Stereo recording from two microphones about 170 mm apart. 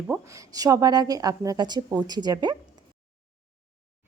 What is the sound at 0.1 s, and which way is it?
A woman's voice, 20° right (ahead or behind).